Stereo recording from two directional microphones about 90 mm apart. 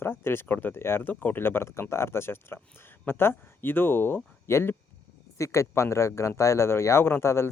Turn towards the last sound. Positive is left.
turn(degrees=30)  # may be behind; listen again after turning